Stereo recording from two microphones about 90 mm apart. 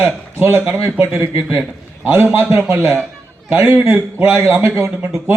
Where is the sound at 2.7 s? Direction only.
30° right (ahead or behind).